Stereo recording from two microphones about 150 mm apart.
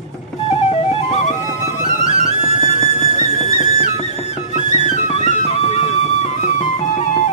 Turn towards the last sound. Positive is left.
turn(degrees=50)  # may be behind; listen again after turning